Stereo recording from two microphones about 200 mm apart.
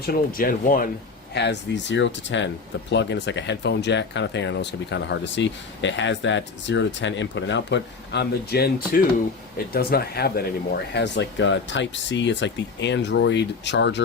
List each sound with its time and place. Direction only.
0.0 s speech: 50° left (ahead or behind)
1.3 s speech: 60° left (ahead or behind)